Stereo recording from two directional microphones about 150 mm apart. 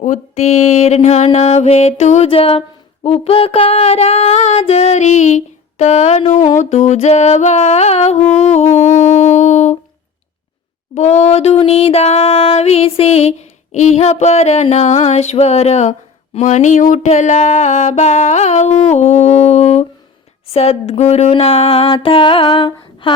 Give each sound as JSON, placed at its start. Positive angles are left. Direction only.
{"t": 0.0, "sound": "mantra", "side_deg": 50}
{"t": 10.9, "sound": "mantra", "side_deg": 50}
{"t": 20.5, "sound": "a sound", "side_deg": 45}